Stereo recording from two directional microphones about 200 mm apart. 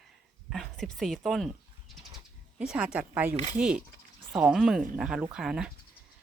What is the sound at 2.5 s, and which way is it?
Speech, 5° right (ahead or behind).